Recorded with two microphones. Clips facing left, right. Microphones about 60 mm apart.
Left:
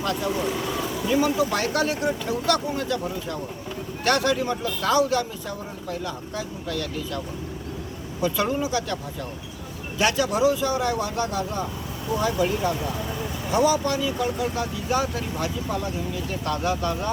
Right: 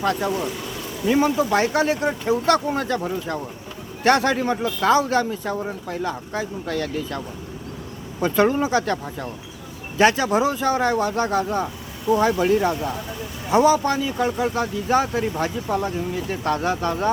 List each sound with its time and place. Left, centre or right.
0.0 s speech: right
8.2 s speech: right
10.0 s speech: right